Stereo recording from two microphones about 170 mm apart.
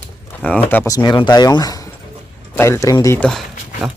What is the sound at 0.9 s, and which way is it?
Speech, 25° left (ahead or behind).